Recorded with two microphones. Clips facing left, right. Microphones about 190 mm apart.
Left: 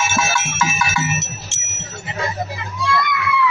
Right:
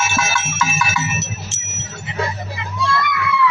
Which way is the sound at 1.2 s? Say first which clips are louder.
Right 3 dB; 35° right (ahead or behind).